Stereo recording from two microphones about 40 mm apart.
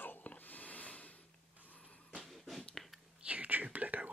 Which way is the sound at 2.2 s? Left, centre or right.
Centre.